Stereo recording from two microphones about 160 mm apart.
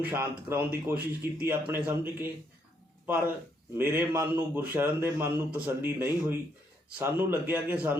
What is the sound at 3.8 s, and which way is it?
A man's voice, 15° right (ahead or behind).